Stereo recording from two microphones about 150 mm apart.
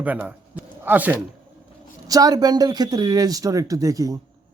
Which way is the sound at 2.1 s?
25° right (ahead or behind).